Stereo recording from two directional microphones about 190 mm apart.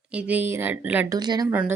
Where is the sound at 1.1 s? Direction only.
20° right (ahead or behind).